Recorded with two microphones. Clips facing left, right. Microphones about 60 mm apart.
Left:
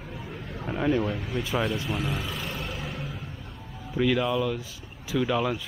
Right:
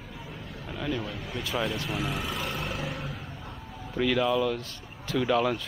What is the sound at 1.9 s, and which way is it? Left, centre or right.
Vehicle, centre.